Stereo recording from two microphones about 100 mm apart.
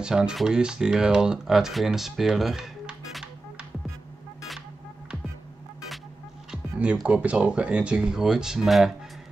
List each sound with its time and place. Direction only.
0.0 s speech: 5° right (ahead or behind)
6.5 s speech: 10° right (ahead or behind)